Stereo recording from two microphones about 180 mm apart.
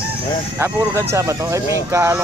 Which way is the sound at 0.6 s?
10° right (ahead or behind).